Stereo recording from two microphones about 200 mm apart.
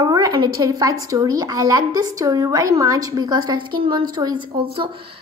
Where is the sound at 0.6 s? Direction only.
15° right (ahead or behind).